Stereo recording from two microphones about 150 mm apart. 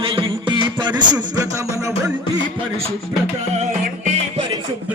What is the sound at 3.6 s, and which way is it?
Music, 45° right (ahead or behind).